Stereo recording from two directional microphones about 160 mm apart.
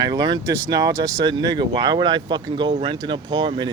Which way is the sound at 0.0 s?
25° right (ahead or behind).